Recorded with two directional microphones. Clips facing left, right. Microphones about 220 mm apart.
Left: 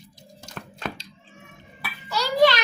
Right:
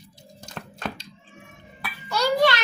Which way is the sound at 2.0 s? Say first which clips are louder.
Left 1 dB; 50° right (ahead or behind).